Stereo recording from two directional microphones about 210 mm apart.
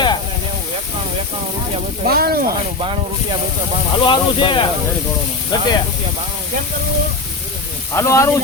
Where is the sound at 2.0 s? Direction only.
45° right (ahead or behind).